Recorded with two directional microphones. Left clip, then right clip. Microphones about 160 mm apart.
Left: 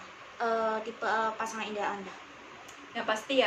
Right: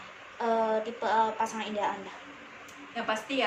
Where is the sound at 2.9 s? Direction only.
20° left (ahead or behind).